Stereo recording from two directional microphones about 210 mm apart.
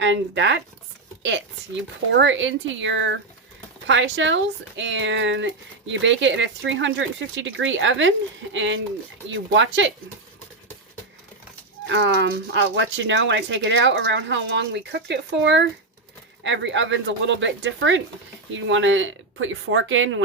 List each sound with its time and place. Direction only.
0.0 s speech: 60° right (ahead or behind)
11.9 s speech: 60° right (ahead or behind)